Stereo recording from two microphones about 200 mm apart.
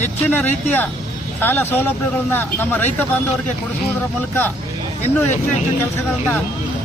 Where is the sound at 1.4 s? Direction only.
10° left (ahead or behind).